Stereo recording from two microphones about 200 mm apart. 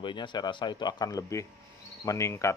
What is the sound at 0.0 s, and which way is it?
A man's voice, 25° left (ahead or behind).